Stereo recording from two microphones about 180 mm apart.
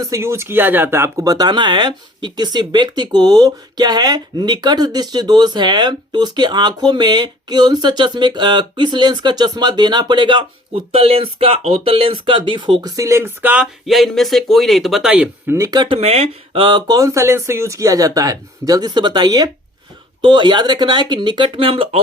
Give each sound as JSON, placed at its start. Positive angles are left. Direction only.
{"t": 0.0, "sound": "speech", "side_deg": -15}